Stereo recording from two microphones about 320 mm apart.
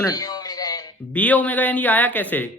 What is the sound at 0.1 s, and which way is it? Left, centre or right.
A man's voice, centre.